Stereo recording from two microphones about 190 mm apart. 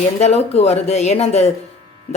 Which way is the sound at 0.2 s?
35° left (ahead or behind).